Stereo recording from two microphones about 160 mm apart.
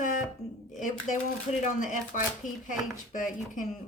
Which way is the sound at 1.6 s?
50° left (ahead or behind).